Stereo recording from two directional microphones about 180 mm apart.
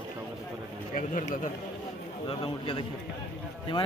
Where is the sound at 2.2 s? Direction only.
30° left (ahead or behind).